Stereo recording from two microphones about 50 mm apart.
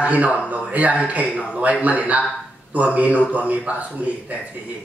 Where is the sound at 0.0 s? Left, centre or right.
Right.